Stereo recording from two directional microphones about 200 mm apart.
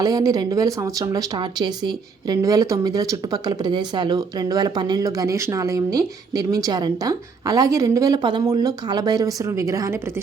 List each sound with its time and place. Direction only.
0.0 s speech: 15° right (ahead or behind)